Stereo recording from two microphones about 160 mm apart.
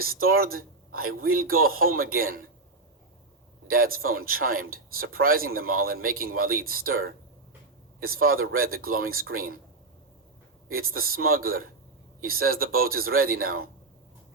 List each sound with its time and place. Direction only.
0.0 s speech: 65° right (ahead or behind)
3.7 s speech: 65° right (ahead or behind)
10.8 s speech: 65° right (ahead or behind)